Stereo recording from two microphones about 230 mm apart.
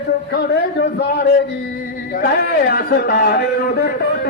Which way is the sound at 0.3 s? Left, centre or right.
Left.